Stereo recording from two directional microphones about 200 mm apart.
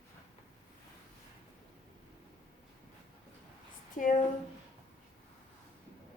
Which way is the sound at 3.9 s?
40° left (ahead or behind).